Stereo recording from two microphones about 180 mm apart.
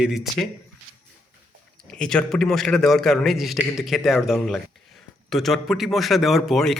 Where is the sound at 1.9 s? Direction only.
5° left (ahead or behind).